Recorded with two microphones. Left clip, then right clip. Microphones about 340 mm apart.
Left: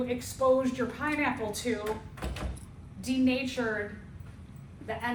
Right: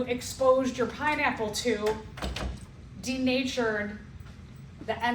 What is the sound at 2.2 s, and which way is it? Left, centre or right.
Door, right.